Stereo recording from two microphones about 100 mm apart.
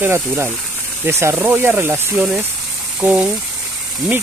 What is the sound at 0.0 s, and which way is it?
Speech, 25° right (ahead or behind).